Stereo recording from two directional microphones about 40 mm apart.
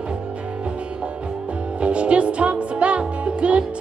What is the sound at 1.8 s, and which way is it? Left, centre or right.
Music, right.